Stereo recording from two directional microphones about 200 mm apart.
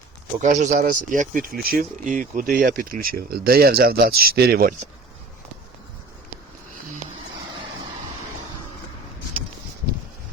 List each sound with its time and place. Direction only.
0.4 s speech: 40° right (ahead or behind)